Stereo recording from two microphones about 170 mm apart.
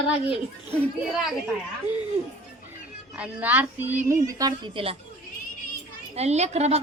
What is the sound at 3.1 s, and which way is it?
A woman's voice, 10° right (ahead or behind).